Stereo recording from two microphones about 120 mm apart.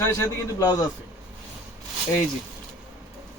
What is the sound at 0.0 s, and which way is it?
Speech, 25° left (ahead or behind).